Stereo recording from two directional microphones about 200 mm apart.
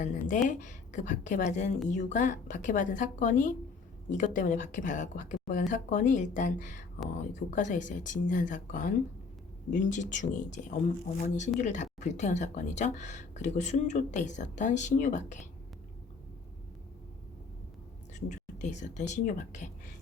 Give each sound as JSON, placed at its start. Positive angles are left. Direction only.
{"t": 0.0, "sound": "speech", "side_deg": 40}
{"t": 18.1, "sound": "speech", "side_deg": 35}